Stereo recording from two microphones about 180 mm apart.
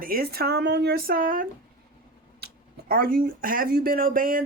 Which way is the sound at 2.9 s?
55° right (ahead or behind).